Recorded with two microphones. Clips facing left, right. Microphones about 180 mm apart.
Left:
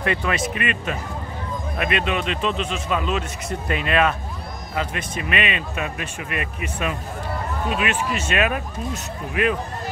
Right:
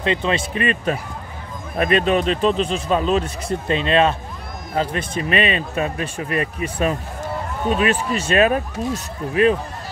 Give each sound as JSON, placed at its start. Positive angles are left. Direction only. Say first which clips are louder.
{"t": 0.0, "sound": "speech", "louder": "right 3 dB", "side_deg": -25}